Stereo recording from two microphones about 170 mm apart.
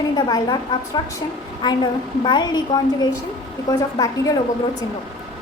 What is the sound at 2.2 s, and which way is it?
A woman's voice, 25° left (ahead or behind).